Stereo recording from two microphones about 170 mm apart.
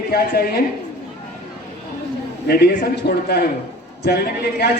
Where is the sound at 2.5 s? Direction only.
70° left (ahead or behind).